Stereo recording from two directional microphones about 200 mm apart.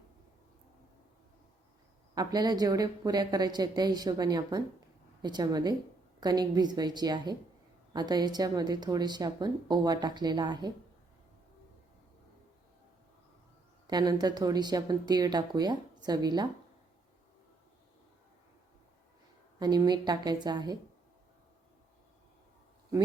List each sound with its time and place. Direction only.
2.1 s a woman's voice: 20° right (ahead or behind)
13.8 s a woman's voice: 20° right (ahead or behind)
19.5 s a woman's voice: 20° right (ahead or behind)